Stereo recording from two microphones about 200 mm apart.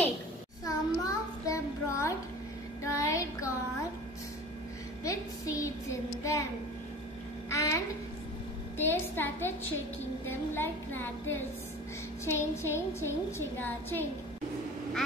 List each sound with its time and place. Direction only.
0.7 s child singing: 15° left (ahead or behind)
5.0 s a sound: 15° left (ahead or behind)
5.6 s child singing: 15° left (ahead or behind)
7.4 s babbling: 15° left (ahead or behind)
8.7 s a sound: 10° left (ahead or behind)
10.2 s a woman's voice: 10° left (ahead or behind)